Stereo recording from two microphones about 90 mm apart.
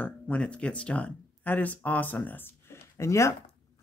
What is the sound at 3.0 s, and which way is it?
Speech, 30° left (ahead or behind).